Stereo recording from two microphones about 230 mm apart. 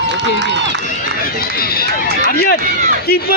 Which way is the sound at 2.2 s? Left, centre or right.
Left.